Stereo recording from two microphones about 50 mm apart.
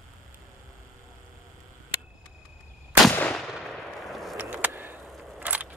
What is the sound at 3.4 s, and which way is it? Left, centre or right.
Firecracker, centre.